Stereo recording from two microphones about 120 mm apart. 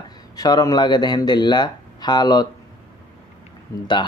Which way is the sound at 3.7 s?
25° left (ahead or behind).